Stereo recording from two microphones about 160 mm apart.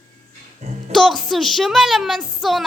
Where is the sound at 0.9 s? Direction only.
Centre (ahead or behind).